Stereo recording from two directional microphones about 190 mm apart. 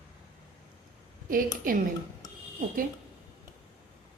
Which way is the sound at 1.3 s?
45° right (ahead or behind).